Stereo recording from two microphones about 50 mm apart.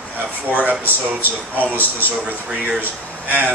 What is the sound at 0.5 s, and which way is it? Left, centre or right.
Speech, right.